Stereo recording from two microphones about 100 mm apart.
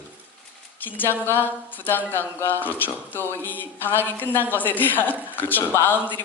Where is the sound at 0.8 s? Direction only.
20° left (ahead or behind).